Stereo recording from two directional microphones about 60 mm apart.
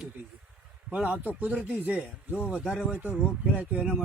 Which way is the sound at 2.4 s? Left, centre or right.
Centre.